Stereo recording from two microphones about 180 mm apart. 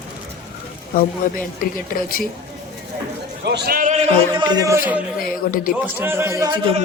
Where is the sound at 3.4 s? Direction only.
70° right (ahead or behind).